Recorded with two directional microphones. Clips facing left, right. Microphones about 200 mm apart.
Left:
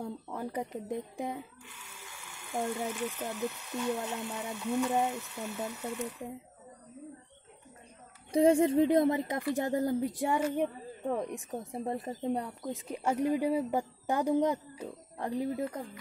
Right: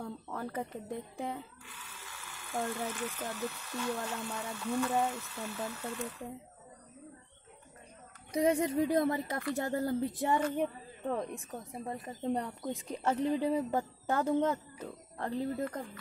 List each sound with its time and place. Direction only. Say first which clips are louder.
0.0 s speech: left 2 dB; 15° left (ahead or behind)
8.3 s speech: left 5 dB; 30° left (ahead or behind)
11.8 s speech: left 6 dB; 25° left (ahead or behind)
12.2 s speech: left 1 dB; 10° left (ahead or behind)